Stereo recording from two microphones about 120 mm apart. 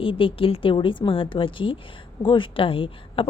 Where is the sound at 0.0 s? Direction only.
50° left (ahead or behind).